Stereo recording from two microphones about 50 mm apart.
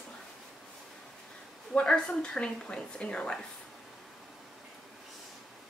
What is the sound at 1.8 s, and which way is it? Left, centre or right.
A woman's voice, centre.